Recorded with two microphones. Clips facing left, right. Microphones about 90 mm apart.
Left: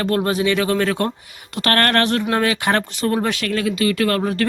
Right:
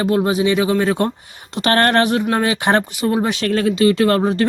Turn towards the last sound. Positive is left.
turn(degrees=-25)  # may be behind; listen again after turning